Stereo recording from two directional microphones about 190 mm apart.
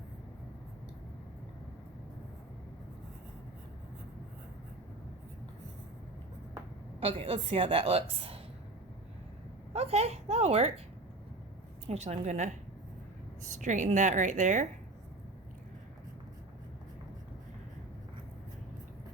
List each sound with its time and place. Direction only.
7.0 s a woman's voice: 30° right (ahead or behind)
9.7 s a woman's voice: 30° right (ahead or behind)
11.9 s a woman's voice: 35° right (ahead or behind)